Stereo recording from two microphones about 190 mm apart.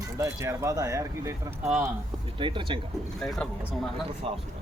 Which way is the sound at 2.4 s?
25° right (ahead or behind).